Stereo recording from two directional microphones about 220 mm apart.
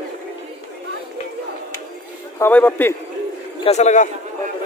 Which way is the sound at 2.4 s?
10° left (ahead or behind).